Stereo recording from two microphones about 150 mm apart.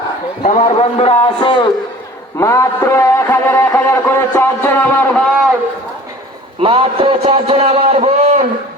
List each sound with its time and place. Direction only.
0.6 s a man's voice: 45° left (ahead or behind)
2.4 s music: 20° left (ahead or behind)
6.6 s a man's voice: 35° right (ahead or behind)